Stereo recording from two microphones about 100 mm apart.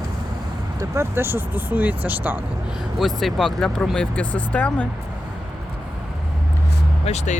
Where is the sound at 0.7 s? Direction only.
30° right (ahead or behind).